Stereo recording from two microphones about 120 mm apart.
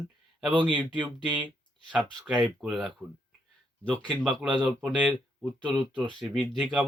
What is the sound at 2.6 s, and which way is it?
Speech, centre (ahead or behind).